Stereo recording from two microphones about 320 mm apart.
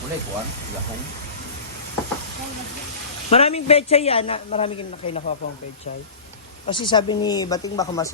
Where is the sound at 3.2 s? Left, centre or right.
Centre.